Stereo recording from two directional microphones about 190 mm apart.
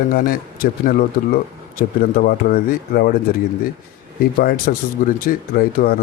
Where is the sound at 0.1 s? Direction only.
50° left (ahead or behind).